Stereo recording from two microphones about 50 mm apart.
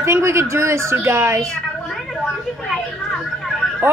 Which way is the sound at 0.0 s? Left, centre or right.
Right.